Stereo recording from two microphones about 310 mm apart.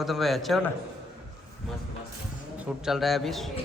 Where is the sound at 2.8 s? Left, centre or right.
Centre.